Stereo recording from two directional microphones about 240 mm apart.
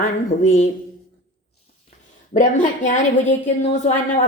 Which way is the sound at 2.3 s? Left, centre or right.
Left.